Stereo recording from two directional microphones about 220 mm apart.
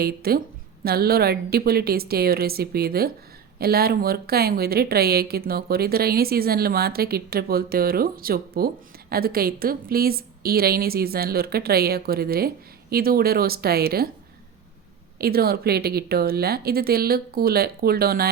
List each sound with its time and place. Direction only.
0.0 s a woman's voice: 45° right (ahead or behind)
15.2 s a woman's voice: 45° right (ahead or behind)